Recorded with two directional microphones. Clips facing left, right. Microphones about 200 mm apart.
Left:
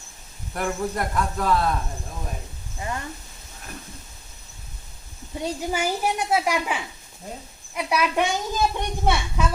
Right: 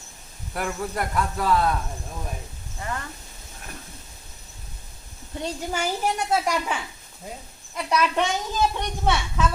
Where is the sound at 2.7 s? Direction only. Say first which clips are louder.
Left 1 dB; 15° left (ahead or behind).